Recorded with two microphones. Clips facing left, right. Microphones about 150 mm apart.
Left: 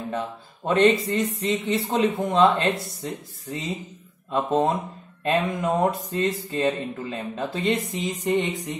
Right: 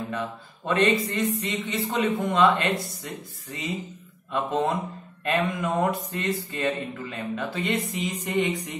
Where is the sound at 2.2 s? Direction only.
25° left (ahead or behind).